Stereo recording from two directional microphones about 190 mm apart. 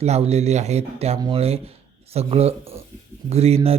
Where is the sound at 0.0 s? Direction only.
35° right (ahead or behind).